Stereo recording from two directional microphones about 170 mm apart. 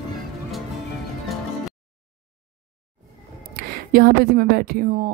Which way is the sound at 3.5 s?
65° right (ahead or behind).